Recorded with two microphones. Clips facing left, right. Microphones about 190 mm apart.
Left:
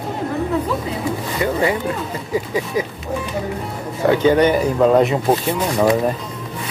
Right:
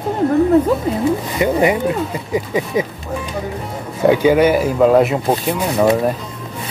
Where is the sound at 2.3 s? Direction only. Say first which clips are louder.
Right 1 dB; 20° right (ahead or behind).